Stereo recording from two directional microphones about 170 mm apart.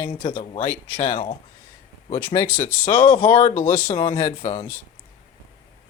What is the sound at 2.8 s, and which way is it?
Speech, 30° left (ahead or behind).